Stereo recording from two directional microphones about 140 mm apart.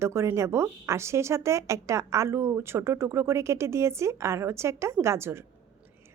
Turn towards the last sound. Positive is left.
turn(degrees=-20)  # may be behind; listen again after turning